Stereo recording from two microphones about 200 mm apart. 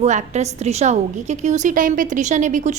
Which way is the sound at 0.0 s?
35° right (ahead or behind).